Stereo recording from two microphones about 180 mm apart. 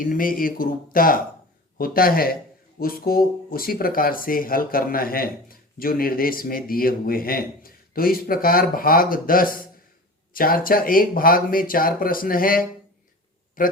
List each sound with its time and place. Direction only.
0.0 s speech: 50° left (ahead or behind)